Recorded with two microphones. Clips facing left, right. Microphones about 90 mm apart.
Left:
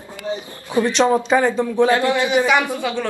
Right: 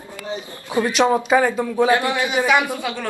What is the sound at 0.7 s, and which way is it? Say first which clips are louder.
Speech: left 1 dB; 15° right (ahead or behind).